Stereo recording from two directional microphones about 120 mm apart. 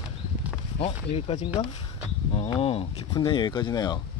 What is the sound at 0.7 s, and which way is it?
Speech, 55° left (ahead or behind).